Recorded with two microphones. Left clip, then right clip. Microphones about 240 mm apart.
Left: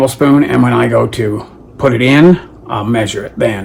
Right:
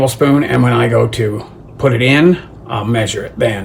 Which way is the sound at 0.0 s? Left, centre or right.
Centre.